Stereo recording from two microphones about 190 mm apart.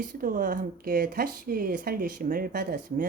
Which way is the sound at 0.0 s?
45° right (ahead or behind).